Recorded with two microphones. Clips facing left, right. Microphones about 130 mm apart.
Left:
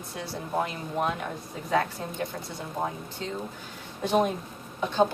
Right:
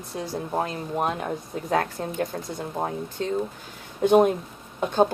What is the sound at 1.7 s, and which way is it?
Speech, 50° right (ahead or behind).